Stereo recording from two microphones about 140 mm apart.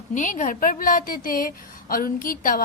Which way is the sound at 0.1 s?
65° left (ahead or behind).